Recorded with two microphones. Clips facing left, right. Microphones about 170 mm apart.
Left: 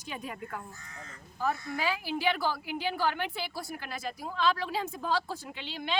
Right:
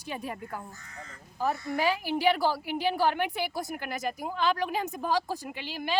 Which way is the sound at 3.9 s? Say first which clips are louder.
Right 5 dB; 15° right (ahead or behind).